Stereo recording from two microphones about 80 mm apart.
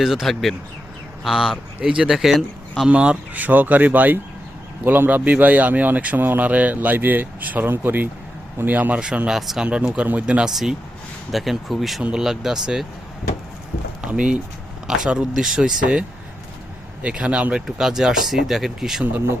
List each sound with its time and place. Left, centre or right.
0.0 s speech: centre
2.9 s speech: centre
9.0 s speech: centre
10.5 s speech: centre
14.0 s speech: centre